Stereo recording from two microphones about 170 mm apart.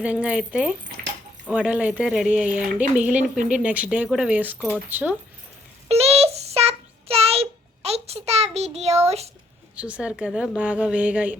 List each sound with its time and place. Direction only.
0.0 s speech: 5° right (ahead or behind)
5.9 s child singing: 35° right (ahead or behind)
9.0 s a woman's voice: 40° right (ahead or behind)
9.7 s speech: 5° right (ahead or behind)